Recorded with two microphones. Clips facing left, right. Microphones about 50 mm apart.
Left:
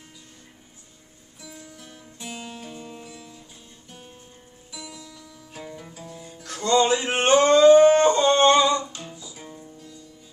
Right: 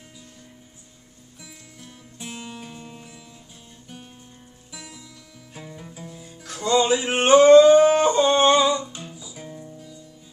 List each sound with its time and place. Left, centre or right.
2.1 s music: centre
4.8 s music: centre
5.5 s music: centre